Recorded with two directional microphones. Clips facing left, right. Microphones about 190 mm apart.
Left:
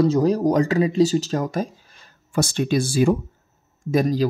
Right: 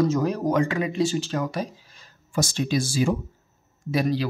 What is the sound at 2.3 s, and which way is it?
Speech, 60° left (ahead or behind).